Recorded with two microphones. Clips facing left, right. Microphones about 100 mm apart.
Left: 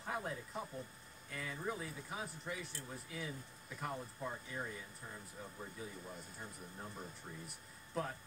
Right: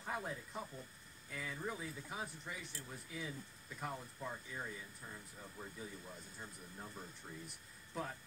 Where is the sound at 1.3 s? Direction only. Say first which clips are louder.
Left 2 dB; centre (ahead or behind).